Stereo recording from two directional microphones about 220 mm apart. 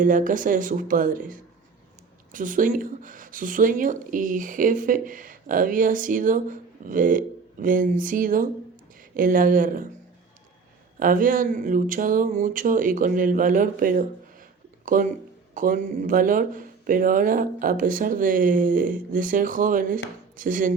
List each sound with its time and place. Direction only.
0.0 s speech: 35° right (ahead or behind)
11.0 s speech: 40° right (ahead or behind)